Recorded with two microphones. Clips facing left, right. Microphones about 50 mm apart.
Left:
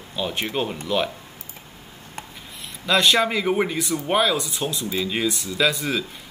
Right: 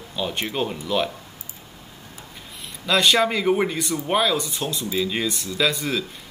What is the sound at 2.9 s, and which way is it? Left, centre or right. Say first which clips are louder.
Speech: even; centre.